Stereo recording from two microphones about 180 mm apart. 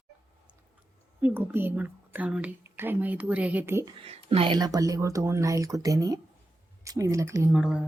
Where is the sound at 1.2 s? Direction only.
10° right (ahead or behind).